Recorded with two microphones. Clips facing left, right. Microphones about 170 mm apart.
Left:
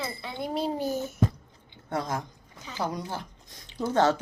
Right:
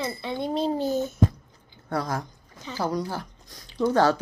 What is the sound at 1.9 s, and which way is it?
Speech, 20° left (ahead or behind).